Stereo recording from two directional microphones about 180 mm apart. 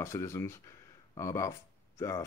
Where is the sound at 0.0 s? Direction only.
15° left (ahead or behind).